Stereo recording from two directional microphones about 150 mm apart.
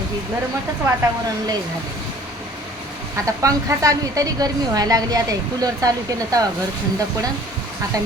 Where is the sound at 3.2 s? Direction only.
20° right (ahead or behind).